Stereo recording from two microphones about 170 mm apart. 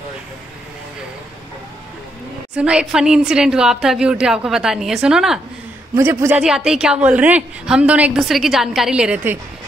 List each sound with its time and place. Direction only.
2.5 s a woman's voice: 5° right (ahead or behind)